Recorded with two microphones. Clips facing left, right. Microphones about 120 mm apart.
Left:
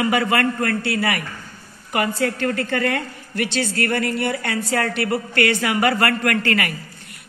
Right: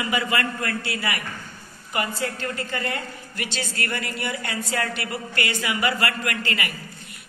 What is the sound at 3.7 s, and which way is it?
Speech, 45° left (ahead or behind).